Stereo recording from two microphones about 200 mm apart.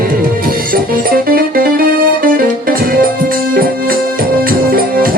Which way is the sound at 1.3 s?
45° right (ahead or behind).